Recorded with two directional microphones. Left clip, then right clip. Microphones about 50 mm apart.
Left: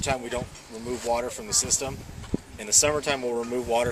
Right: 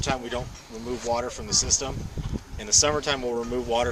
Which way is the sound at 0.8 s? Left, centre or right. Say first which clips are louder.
Even; left.